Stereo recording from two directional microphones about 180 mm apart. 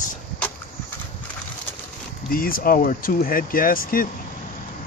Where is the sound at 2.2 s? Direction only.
55° left (ahead or behind).